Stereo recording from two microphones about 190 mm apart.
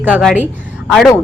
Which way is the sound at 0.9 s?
Centre (ahead or behind).